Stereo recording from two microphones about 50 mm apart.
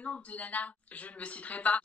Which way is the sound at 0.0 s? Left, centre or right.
Left.